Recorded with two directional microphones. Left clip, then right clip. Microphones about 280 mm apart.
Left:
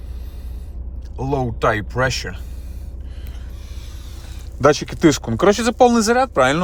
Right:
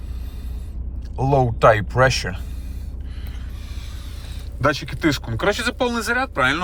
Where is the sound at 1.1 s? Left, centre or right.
Centre.